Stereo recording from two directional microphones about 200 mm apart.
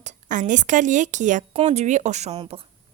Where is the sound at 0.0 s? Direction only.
40° right (ahead or behind).